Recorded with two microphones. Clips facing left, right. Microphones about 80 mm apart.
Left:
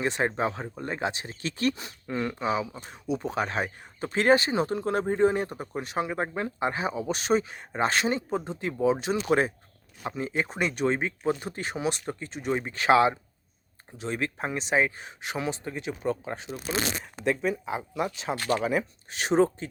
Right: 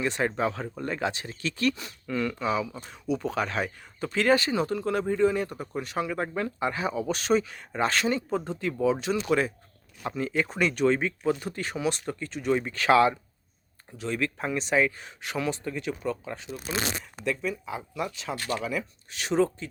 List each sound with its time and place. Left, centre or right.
0.2 s speech: left
7.0 s speech: centre
7.3 s speech: left
8.4 s speech: centre
8.6 s speech: left